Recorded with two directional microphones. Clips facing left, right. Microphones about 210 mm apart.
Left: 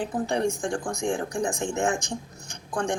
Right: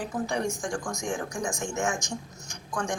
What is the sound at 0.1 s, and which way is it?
Speech, 35° left (ahead or behind).